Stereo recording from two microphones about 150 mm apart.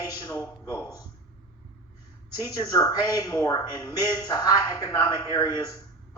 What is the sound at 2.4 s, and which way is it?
Speech, 25° left (ahead or behind).